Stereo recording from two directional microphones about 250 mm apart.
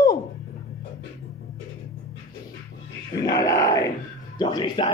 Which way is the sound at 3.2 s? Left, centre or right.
Centre.